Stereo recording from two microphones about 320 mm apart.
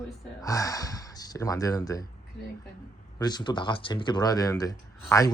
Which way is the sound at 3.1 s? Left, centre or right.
Centre.